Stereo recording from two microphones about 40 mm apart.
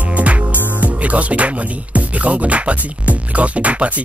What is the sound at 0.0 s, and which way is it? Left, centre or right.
Music, right.